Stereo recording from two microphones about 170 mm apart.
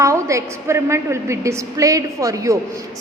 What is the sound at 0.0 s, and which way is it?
A woman's voice, 20° right (ahead or behind).